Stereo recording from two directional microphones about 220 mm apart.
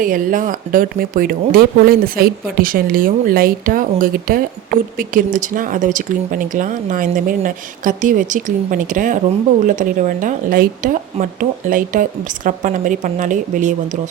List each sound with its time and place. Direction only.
0.0 s speech: 40° right (ahead or behind)